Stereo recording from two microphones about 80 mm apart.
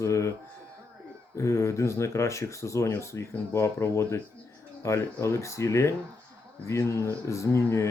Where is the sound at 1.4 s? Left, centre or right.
Left.